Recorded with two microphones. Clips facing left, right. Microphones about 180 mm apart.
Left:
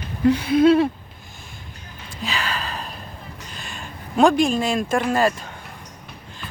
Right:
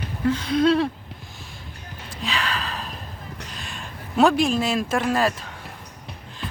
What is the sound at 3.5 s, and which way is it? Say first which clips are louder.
Speech: left 1 dB; centre (ahead or behind).